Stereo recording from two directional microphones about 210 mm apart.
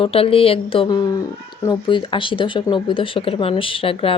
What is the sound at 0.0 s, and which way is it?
Speech, 25° left (ahead or behind).